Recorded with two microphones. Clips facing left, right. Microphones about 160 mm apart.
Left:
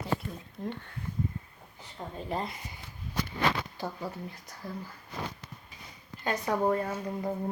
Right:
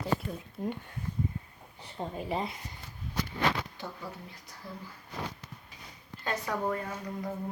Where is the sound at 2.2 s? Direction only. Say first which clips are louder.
Left 1 dB; 5° right (ahead or behind).